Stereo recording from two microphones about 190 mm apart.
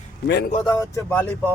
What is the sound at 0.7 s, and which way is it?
Speech, 15° left (ahead or behind).